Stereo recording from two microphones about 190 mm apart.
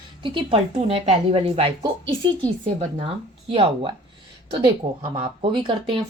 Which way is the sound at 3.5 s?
30° right (ahead or behind).